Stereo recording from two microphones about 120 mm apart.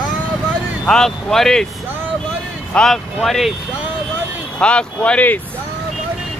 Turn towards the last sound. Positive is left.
turn(degrees=10)  # may be behind; listen again after turning